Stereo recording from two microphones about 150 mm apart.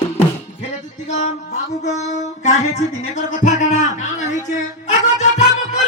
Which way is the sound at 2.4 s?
50° left (ahead or behind).